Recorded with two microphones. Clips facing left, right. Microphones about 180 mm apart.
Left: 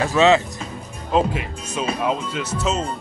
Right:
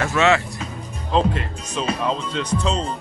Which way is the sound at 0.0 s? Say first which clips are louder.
Left 3 dB; 20° left (ahead or behind).